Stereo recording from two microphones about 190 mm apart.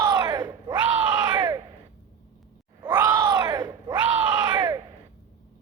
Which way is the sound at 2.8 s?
20° right (ahead or behind).